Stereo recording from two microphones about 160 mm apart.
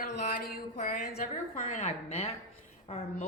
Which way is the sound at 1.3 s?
45° left (ahead or behind).